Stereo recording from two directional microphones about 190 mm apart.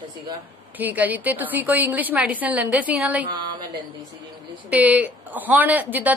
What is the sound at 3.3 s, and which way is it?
Speech, 25° right (ahead or behind).